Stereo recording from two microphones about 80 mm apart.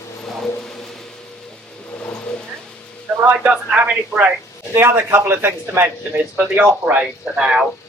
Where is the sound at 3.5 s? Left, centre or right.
Centre.